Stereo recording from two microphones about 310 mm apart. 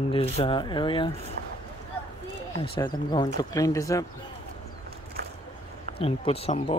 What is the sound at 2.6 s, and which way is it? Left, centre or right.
Speech, centre.